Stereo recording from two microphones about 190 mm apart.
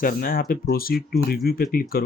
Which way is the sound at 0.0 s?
50° left (ahead or behind).